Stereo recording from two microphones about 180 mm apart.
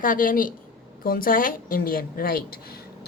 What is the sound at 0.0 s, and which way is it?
A woman's voice, 50° left (ahead or behind).